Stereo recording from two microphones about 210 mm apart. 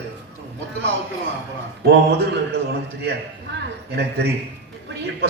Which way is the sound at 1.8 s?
50° right (ahead or behind).